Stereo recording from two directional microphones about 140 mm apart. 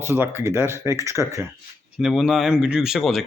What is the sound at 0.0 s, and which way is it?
Speech, 15° right (ahead or behind).